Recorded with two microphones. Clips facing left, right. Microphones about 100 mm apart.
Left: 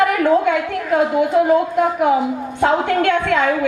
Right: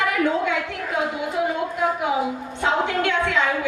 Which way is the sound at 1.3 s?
50° left (ahead or behind).